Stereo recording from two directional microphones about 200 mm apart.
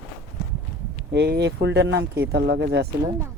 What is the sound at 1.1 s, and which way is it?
Speech, 60° right (ahead or behind).